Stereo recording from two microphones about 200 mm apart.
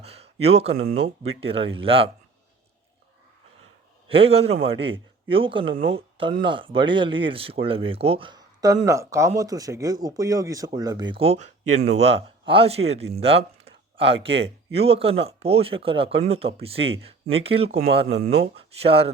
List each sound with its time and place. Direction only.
0.0 s speech: 30° right (ahead or behind)
4.1 s speech: 30° right (ahead or behind)